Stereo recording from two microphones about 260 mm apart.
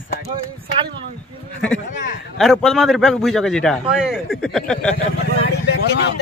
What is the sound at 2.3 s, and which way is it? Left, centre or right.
Speech, centre.